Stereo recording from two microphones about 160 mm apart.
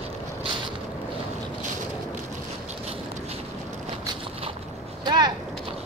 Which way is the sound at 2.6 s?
40° right (ahead or behind).